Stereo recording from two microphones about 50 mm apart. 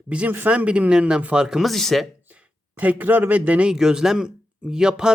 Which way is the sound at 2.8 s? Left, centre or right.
Right.